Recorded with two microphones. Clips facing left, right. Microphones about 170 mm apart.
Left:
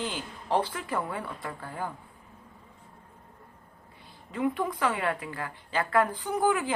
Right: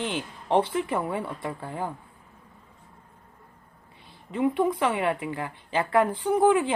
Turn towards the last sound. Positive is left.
turn(degrees=-25)  # may be behind; listen again after turning